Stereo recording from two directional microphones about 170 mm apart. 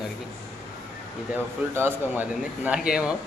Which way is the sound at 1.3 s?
10° right (ahead or behind).